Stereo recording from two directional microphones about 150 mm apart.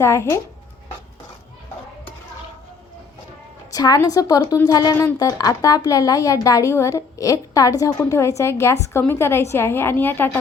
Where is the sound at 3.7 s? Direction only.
25° left (ahead or behind).